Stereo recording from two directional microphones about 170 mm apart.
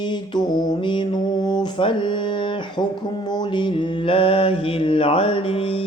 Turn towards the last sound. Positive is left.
turn(degrees=35)  # may be behind; listen again after turning